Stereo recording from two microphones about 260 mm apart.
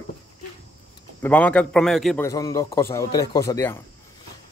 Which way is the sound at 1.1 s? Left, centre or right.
Centre.